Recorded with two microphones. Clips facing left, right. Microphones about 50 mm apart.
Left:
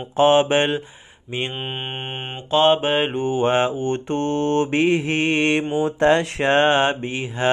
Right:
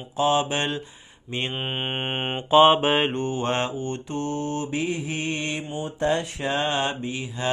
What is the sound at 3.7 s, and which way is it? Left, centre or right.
Mantra, left.